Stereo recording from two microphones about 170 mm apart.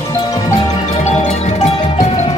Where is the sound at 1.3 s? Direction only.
40° left (ahead or behind).